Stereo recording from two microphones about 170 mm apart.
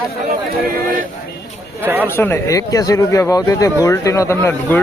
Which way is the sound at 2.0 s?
15° left (ahead or behind).